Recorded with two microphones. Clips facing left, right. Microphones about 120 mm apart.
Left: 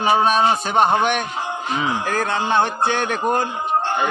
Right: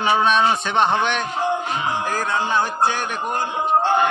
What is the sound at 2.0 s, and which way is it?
A man's voice, 65° left (ahead or behind).